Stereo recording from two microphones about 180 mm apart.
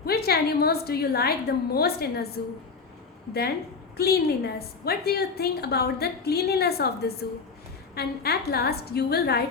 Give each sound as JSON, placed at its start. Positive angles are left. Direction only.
{"t": 0.0, "sound": "a woman's voice", "side_deg": 60}
{"t": 3.9, "sound": "a woman's voice", "side_deg": 60}